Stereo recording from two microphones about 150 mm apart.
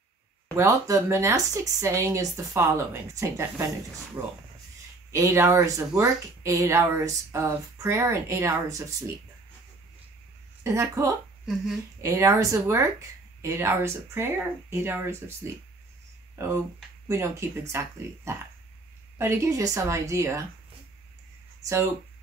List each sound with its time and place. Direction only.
0.6 s speech: 20° right (ahead or behind)
10.6 s speech: 20° right (ahead or behind)